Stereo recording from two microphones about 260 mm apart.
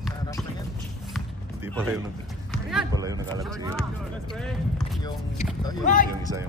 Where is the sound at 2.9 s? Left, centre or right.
Centre.